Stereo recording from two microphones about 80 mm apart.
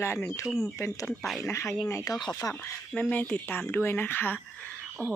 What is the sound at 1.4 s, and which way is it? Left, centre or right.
Speech, left.